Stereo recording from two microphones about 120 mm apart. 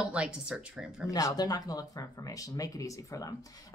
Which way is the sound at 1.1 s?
30° left (ahead or behind).